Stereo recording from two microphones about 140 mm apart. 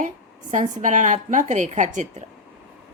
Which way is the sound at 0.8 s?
65° right (ahead or behind).